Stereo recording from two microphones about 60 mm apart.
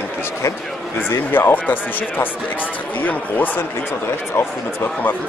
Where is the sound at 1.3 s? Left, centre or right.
Left.